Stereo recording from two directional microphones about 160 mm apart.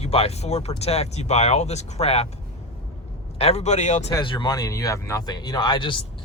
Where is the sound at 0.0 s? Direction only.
40° left (ahead or behind).